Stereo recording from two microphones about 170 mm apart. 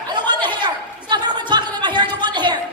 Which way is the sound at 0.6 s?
25° right (ahead or behind).